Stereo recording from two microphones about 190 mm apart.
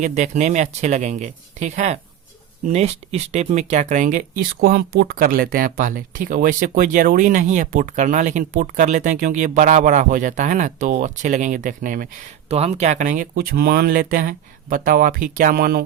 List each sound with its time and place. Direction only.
0.0 s speech: 40° right (ahead or behind)
4.6 s speech: 60° right (ahead or behind)
12.5 s speech: 35° right (ahead or behind)
13.3 s speech: 55° right (ahead or behind)